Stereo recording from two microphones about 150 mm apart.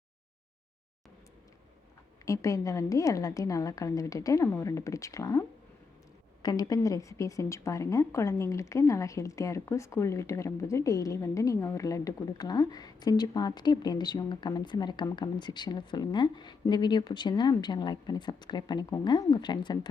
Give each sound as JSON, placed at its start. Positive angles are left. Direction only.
{"t": 2.2, "sound": "a woman's voice", "side_deg": 20}